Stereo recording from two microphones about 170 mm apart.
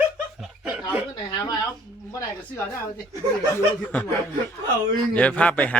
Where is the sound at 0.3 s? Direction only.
5° right (ahead or behind).